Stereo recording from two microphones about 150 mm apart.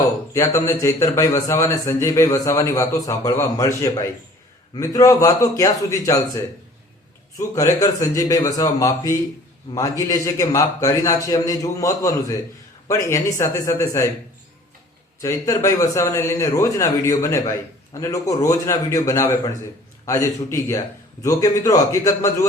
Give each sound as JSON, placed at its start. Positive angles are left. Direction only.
{"t": 0.3, "sound": "a man's voice", "side_deg": 20}
{"t": 15.2, "sound": "a man's voice", "side_deg": 20}